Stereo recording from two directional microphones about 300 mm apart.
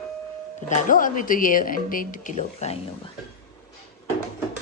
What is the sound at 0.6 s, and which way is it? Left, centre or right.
A woman's voice, left.